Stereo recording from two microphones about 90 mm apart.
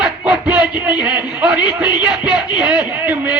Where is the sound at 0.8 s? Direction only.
10° right (ahead or behind).